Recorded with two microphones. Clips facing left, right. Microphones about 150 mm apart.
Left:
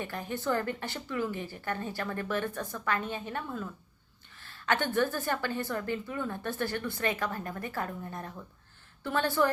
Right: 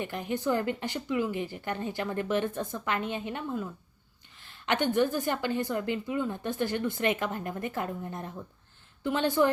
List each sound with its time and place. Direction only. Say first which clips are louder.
0.0 s a woman's voice: right 3 dB; 20° right (ahead or behind)
4.4 s a sound: right 1 dB; 15° right (ahead or behind)
5.1 s a woman's voice: right 3 dB; 15° right (ahead or behind)